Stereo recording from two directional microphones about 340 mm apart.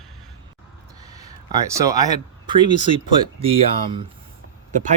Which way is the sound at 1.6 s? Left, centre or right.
Centre.